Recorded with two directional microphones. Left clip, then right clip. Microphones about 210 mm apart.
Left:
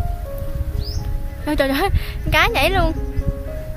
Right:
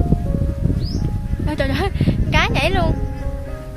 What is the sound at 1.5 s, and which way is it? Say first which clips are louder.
Speech: left 4 dB; 25° left (ahead or behind).